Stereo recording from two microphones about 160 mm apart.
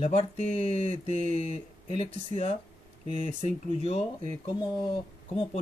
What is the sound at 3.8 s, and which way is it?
Speech, 40° left (ahead or behind).